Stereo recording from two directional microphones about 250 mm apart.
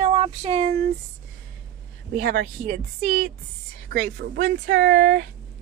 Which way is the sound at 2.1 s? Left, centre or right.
Right.